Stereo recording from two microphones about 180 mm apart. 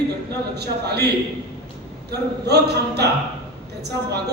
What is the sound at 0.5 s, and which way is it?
A man's voice, 65° right (ahead or behind).